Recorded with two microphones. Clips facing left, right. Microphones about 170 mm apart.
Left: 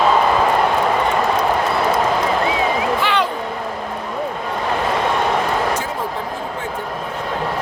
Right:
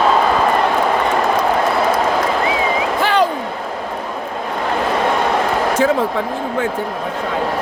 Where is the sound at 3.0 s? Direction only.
40° right (ahead or behind).